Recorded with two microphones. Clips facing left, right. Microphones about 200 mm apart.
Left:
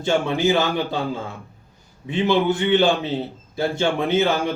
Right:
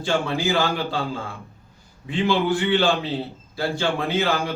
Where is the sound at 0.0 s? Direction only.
20° left (ahead or behind).